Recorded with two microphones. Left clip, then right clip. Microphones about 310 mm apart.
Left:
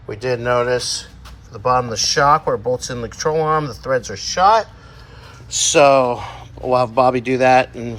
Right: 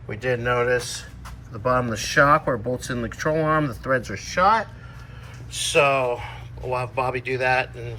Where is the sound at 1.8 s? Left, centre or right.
Centre.